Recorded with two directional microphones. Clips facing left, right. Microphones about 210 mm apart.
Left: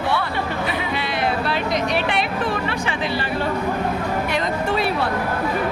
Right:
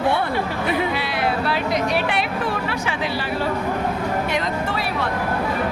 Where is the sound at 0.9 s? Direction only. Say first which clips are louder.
Even; 5° right (ahead or behind).